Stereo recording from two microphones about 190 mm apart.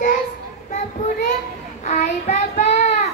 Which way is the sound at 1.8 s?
40° left (ahead or behind).